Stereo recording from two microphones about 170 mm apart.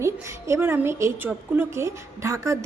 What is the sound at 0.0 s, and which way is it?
A woman's voice, 15° right (ahead or behind).